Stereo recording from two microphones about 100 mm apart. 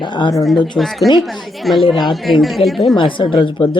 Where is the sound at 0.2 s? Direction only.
45° left (ahead or behind).